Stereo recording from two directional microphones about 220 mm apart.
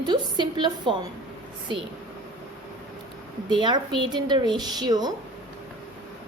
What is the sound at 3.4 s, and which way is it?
A woman's voice, 20° right (ahead or behind).